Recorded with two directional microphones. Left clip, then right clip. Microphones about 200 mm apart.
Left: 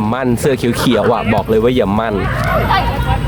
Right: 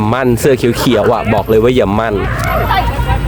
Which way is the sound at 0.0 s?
35° right (ahead or behind).